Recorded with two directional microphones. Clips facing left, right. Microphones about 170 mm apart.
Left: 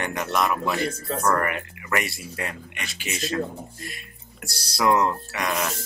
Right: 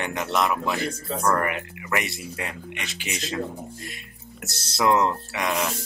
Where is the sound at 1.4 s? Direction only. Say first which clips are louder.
Even; 20° right (ahead or behind).